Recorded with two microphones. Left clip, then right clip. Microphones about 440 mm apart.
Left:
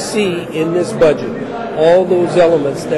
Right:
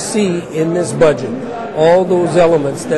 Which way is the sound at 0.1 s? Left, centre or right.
Right.